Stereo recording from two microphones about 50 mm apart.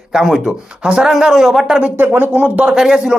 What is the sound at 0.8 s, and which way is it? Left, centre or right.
Speech, centre.